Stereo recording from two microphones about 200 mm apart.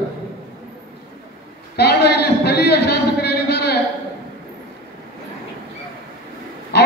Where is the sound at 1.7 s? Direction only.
55° left (ahead or behind).